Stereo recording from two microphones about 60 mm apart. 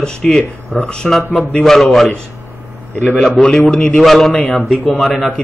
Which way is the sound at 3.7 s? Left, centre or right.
Centre.